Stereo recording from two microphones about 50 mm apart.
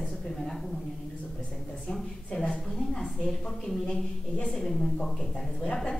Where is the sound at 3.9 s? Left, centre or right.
Left.